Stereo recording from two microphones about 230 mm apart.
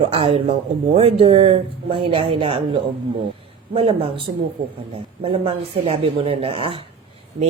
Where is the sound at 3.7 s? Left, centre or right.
Right.